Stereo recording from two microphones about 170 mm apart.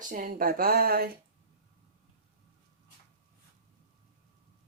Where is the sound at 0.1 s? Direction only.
55° right (ahead or behind).